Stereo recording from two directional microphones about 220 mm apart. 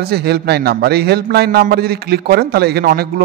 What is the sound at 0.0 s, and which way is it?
A man's voice, 45° right (ahead or behind).